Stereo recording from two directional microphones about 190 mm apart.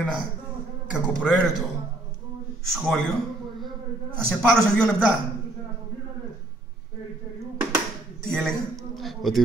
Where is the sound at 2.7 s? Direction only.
Centre (ahead or behind).